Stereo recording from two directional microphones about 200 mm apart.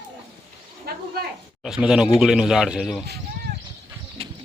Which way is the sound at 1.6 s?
5° right (ahead or behind).